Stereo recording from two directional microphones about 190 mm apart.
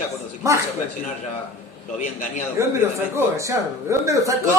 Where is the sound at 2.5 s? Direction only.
15° right (ahead or behind).